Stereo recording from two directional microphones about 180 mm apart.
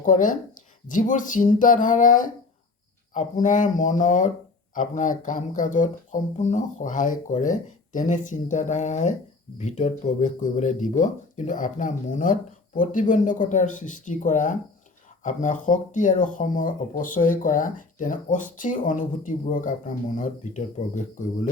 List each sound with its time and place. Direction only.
0.0 s speech: 45° left (ahead or behind)